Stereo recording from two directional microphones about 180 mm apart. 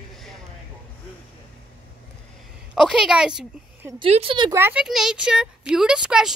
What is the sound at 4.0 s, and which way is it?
Speech, 30° right (ahead or behind).